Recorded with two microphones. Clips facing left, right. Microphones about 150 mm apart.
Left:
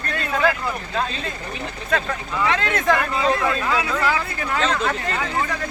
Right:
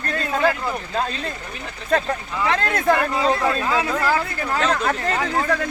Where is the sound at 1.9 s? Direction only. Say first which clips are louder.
Right 3 dB; 35° right (ahead or behind).